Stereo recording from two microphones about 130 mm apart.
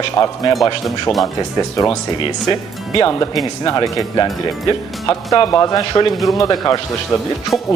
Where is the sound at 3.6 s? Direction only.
30° left (ahead or behind).